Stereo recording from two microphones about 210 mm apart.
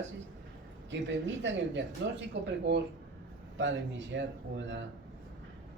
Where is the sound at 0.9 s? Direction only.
60° right (ahead or behind).